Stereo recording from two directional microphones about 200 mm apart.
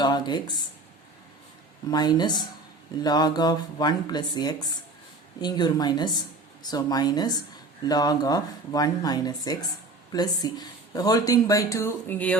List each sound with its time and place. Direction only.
0.0 s speech: 20° left (ahead or behind)
1.9 s speech: 20° left (ahead or behind)